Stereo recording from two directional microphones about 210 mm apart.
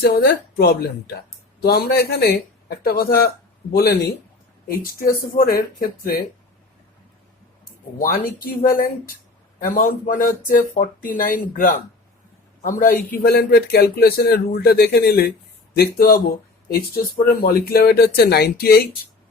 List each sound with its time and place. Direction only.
0.0 s speech: 50° left (ahead or behind)
7.9 s speech: 40° left (ahead or behind)